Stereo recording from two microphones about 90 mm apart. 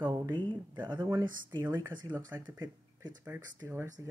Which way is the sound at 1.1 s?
40° right (ahead or behind).